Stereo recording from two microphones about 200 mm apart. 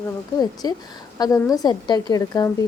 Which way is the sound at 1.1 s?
20° left (ahead or behind).